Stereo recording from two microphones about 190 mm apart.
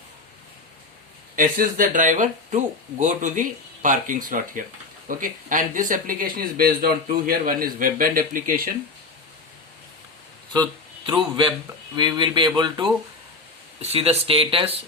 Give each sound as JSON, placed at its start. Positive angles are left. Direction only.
{"t": 1.4, "sound": "speech", "side_deg": -45}
{"t": 10.5, "sound": "speech", "side_deg": -20}